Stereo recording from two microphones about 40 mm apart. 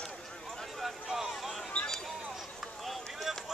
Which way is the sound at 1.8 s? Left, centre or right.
Left.